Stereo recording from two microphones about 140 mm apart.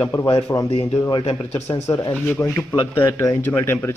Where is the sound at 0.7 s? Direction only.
45° left (ahead or behind).